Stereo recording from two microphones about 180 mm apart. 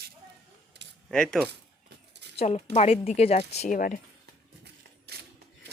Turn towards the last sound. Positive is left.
turn(degrees=-65)  # may be behind; listen again after turning